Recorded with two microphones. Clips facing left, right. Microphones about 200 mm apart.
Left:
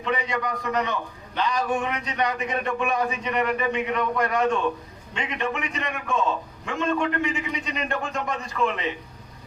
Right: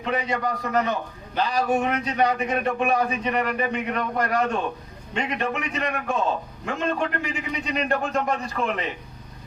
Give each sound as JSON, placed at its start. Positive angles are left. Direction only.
{"t": 0.0, "sound": "a man's voice", "side_deg": -40}